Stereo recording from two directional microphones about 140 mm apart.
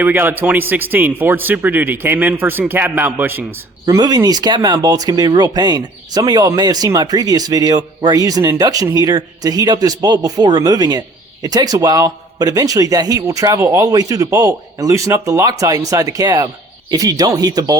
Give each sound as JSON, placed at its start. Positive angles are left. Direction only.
{"t": 0.0, "sound": "speech", "side_deg": -15}
{"t": 3.8, "sound": "speech", "side_deg": -25}